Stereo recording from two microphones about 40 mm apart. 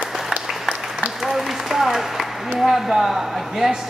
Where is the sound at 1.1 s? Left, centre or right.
Centre.